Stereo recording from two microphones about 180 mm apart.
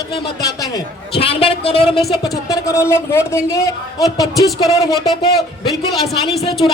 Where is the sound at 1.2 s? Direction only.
30° left (ahead or behind).